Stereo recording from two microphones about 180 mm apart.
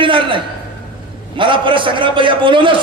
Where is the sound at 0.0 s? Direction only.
30° right (ahead or behind).